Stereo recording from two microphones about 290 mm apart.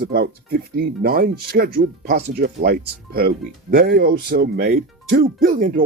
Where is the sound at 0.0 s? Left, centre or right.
Right.